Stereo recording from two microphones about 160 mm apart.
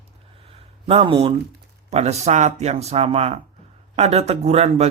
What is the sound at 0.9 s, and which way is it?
Speech, 35° right (ahead or behind).